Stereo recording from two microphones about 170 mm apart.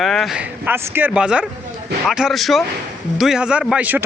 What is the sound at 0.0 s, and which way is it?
A man's voice, centre (ahead or behind).